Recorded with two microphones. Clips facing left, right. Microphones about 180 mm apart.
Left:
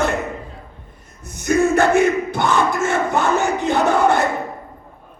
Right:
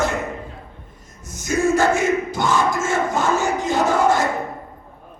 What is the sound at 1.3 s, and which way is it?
Crowd, 60° left (ahead or behind).